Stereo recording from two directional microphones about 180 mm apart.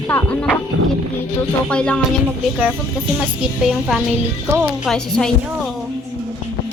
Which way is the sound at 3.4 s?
5° right (ahead or behind).